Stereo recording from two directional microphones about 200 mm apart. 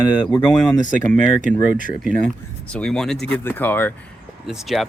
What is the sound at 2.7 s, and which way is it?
Speech, 5° left (ahead or behind).